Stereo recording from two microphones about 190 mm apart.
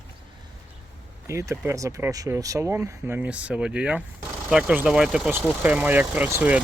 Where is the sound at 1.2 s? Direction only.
15° right (ahead or behind).